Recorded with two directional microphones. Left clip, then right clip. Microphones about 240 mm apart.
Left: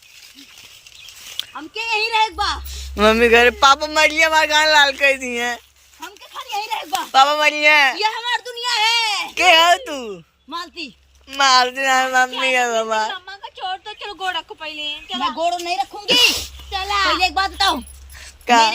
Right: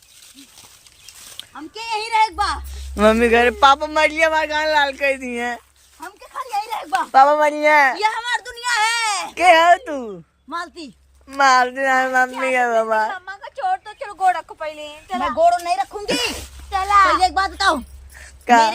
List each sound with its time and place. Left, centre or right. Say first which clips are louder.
1.4 s speech: left 6 dB; centre
7.1 s speech: right 1 dB; right
7.9 s a sound: even; centre
10.5 s a woman's voice: even; centre
11.3 s a sound: even; centre
14.8 s speech: left 3 dB; centre